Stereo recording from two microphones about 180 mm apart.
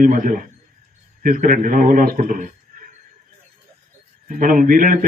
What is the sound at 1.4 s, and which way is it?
A man's voice, 50° right (ahead or behind).